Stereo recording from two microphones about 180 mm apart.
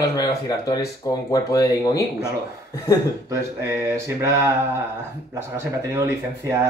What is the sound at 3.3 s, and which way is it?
Speech, 15° right (ahead or behind).